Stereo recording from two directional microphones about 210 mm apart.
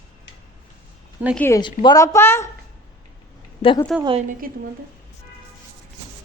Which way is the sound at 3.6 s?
20° left (ahead or behind).